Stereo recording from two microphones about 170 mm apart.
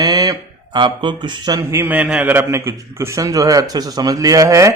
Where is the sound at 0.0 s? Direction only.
25° right (ahead or behind).